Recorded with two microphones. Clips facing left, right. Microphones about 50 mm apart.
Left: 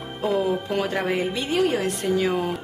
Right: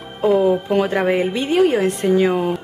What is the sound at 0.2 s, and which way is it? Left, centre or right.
Speech, centre.